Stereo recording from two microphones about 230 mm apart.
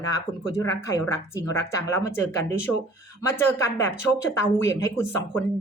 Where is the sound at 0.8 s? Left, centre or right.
Centre.